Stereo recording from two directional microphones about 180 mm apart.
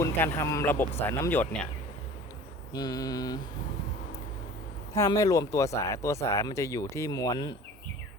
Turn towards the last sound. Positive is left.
turn(degrees=20)  # may be behind; listen again after turning